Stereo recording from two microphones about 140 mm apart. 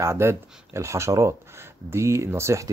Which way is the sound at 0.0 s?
20° right (ahead or behind).